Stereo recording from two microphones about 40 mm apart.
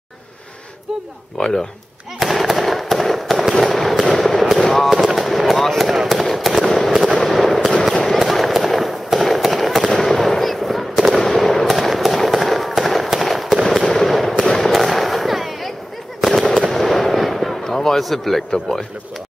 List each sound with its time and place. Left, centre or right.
1.4 s speech: centre
2.1 s fireworks: centre
17.6 s a sound: centre
18.0 s a man's voice: centre